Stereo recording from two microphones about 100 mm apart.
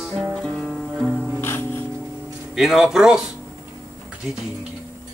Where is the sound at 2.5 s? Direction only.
5° right (ahead or behind).